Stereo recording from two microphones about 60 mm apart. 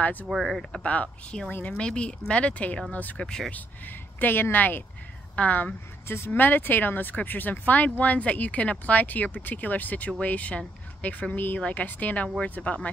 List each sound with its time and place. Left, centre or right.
0.0 s speech: left
0.3 s speech: centre
0.8 s speech: left
3.2 s speech: centre
3.5 s a woman's voice: left
6.0 s speech: left